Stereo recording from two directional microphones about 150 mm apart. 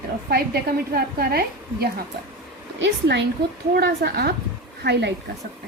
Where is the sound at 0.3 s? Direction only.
90° right.